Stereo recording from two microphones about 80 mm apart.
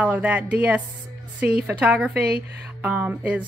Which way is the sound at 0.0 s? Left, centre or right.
Centre.